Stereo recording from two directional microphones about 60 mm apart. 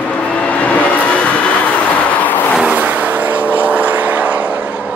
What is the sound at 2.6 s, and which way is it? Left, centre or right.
Vehicle, right.